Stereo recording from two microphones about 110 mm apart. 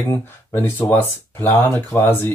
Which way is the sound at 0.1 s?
20° left (ahead or behind).